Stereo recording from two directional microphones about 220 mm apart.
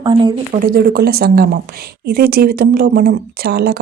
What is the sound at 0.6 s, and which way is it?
Speech, 40° right (ahead or behind).